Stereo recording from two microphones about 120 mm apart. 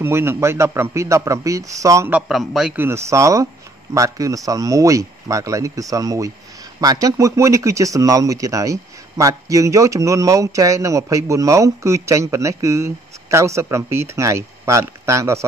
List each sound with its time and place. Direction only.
0.0 s speech: 20° right (ahead or behind)
2.2 s a man's voice: 5° right (ahead or behind)
2.7 s speech: 20° right (ahead or behind)